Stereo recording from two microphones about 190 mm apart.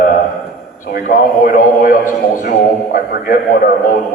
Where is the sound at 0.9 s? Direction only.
45° left (ahead or behind).